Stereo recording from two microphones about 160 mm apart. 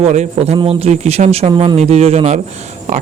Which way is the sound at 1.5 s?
30° right (ahead or behind).